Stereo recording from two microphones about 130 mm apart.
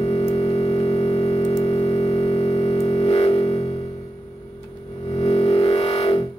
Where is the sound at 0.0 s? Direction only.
50° left (ahead or behind).